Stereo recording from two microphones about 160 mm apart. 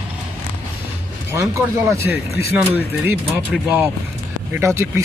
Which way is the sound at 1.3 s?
20° right (ahead or behind).